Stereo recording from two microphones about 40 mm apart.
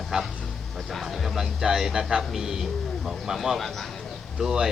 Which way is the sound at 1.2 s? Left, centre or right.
Centre.